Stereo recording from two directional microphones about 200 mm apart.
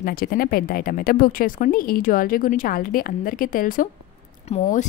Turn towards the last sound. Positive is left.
turn(degrees=35)  # may be behind; listen again after turning